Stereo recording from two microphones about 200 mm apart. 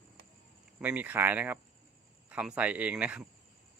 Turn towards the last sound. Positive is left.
turn(degrees=-5)  # may be behind; listen again after turning